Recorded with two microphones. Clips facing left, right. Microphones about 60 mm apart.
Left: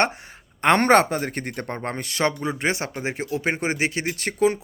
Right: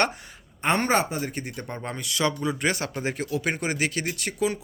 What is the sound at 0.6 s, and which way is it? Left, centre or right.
Speech, left.